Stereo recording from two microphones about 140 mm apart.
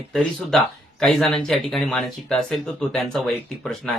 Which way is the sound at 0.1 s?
5° left (ahead or behind).